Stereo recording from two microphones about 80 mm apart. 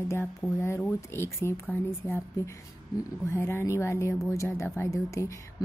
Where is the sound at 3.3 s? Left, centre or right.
Left.